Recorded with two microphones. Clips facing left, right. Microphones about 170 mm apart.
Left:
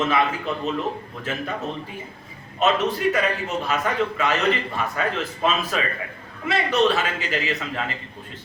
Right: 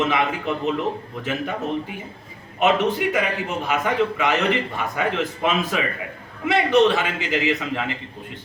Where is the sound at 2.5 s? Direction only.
20° right (ahead or behind).